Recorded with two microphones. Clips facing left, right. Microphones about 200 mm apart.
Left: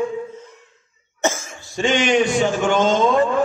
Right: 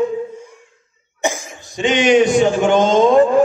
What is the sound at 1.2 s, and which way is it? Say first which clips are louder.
Cough: right 1 dB; 15° right (ahead or behind).